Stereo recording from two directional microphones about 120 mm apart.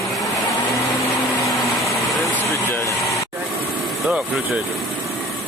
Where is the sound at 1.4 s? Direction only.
25° left (ahead or behind).